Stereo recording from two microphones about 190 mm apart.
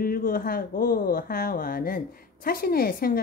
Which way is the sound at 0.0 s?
50° left (ahead or behind).